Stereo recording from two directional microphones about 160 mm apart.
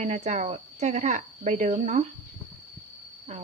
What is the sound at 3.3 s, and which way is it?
Speech, 45° right (ahead or behind).